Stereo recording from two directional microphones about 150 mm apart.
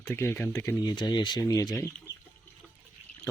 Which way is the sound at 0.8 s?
25° left (ahead or behind).